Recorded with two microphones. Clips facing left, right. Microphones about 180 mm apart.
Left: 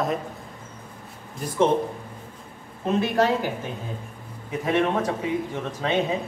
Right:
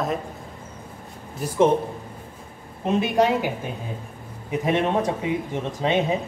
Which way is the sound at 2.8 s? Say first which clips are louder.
Right 2 dB; 20° right (ahead or behind).